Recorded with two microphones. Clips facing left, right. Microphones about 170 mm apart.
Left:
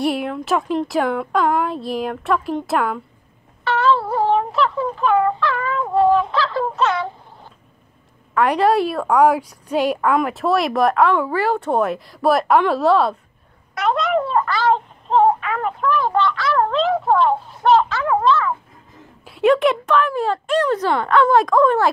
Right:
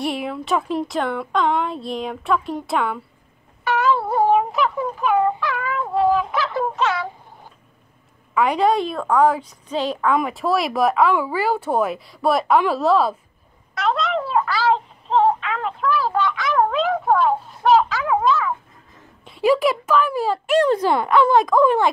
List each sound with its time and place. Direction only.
0.0 s speech: centre (ahead or behind)
3.6 s a sound: 15° right (ahead or behind)
6.3 s fowl: 20° right (ahead or behind)
6.8 s speech: 5° right (ahead or behind)
8.4 s a woman's voice: centre (ahead or behind)
10.1 s speech: centre (ahead or behind)
13.7 s child singing: centre (ahead or behind)
17.1 s speech: 5° right (ahead or behind)